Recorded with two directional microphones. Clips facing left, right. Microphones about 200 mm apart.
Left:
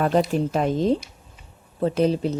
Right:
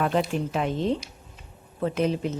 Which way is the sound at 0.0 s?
40° left (ahead or behind).